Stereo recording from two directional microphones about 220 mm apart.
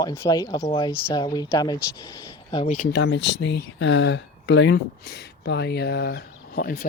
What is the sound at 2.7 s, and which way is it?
Speech, 45° left (ahead or behind).